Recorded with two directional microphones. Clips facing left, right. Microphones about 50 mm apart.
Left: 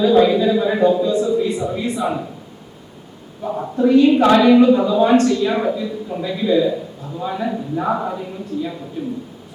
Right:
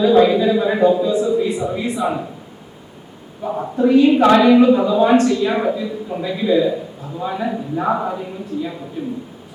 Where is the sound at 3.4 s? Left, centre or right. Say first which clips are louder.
Even; centre.